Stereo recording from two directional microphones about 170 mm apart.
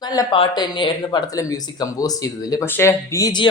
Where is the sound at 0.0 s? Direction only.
25° left (ahead or behind).